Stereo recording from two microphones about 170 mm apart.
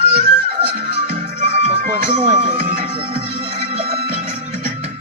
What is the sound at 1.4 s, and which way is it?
Music, 40° right (ahead or behind).